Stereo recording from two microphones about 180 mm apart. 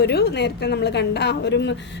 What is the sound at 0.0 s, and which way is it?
A woman's voice, 65° left (ahead or behind).